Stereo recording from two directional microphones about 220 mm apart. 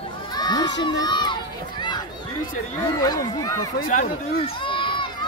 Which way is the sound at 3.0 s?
15° left (ahead or behind).